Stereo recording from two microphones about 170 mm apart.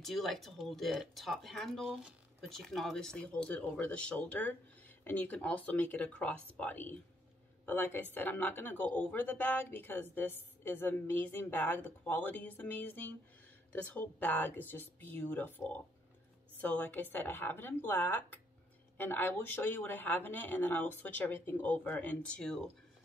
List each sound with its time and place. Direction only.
0.0 s speech: centre (ahead or behind)